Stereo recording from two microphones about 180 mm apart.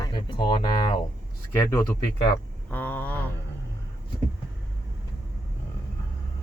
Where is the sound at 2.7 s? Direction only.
10° left (ahead or behind).